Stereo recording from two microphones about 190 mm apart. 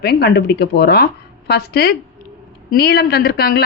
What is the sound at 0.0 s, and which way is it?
Speech, 60° left (ahead or behind).